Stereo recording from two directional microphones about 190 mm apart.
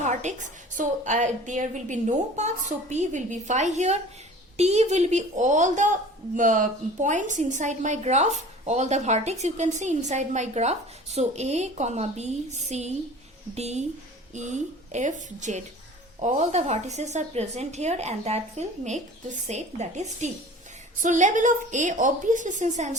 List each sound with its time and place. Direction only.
0.1 s a woman's voice: 40° right (ahead or behind)